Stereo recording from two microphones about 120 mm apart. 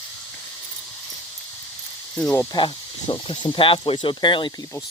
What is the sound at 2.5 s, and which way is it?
Speech, 40° left (ahead or behind).